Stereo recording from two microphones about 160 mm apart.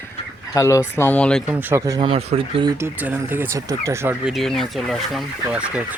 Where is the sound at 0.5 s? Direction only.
20° left (ahead or behind).